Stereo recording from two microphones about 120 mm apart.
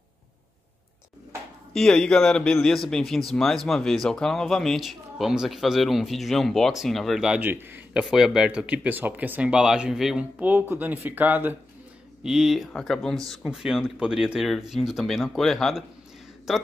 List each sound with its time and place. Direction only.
1.7 s a man's voice: 5° left (ahead or behind)
7.4 s speech: 15° right (ahead or behind)
10.4 s a man's voice: 15° right (ahead or behind)